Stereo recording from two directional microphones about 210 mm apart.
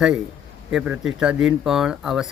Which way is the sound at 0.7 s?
5° right (ahead or behind).